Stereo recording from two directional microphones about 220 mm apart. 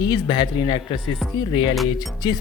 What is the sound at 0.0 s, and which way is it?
Speech, 20° left (ahead or behind).